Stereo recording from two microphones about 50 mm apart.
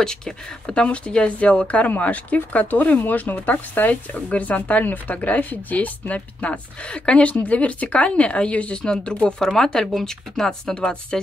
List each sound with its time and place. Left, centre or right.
0.0 s speech: centre